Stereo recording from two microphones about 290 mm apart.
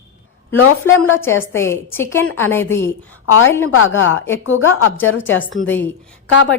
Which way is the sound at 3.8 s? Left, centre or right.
Left.